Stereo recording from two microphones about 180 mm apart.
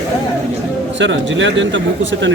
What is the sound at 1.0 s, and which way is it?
Speech, 90° right.